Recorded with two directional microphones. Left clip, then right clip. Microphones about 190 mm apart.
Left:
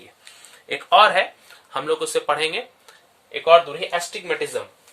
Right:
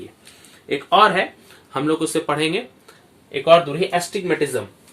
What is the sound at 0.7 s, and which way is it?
Speech, 25° left (ahead or behind).